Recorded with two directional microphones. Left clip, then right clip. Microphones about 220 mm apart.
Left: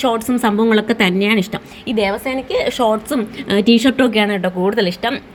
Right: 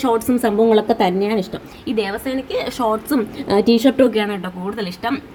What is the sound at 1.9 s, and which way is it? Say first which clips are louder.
A woman's voice: left 3 dB; 5° left (ahead or behind).